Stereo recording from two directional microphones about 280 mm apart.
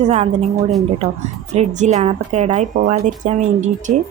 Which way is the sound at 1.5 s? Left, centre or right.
Right.